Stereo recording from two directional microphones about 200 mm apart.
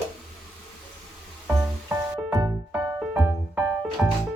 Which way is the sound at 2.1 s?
20° right (ahead or behind).